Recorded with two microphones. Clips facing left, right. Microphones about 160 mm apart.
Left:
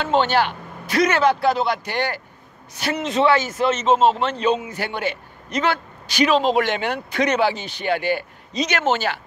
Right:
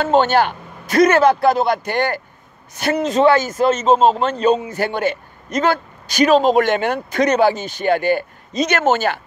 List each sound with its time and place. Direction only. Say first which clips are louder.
0.0 s a man's voice: right 4 dB; 45° right (ahead or behind)